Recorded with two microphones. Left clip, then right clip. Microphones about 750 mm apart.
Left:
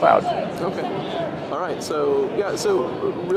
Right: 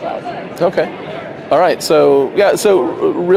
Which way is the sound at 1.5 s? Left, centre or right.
Right.